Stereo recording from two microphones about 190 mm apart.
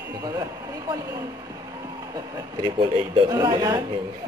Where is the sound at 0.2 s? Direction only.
20° right (ahead or behind).